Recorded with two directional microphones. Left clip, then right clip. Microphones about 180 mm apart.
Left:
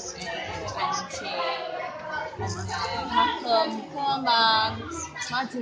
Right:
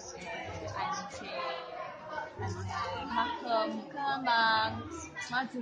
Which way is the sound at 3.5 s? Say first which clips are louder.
Left 8 dB; centre (ahead or behind).